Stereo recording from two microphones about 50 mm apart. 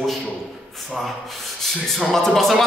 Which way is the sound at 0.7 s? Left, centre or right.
Centre.